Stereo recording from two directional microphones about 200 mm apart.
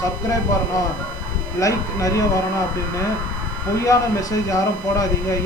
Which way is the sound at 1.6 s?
15° left (ahead or behind).